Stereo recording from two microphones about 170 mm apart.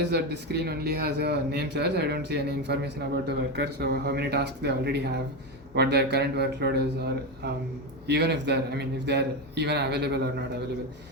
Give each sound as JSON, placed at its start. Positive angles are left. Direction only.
{"t": 0.0, "sound": "a man's voice", "side_deg": -80}